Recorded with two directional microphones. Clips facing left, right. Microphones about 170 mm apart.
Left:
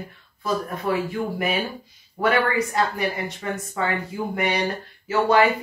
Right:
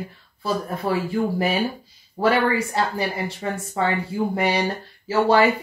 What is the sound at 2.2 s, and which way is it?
Speech, 30° right (ahead or behind).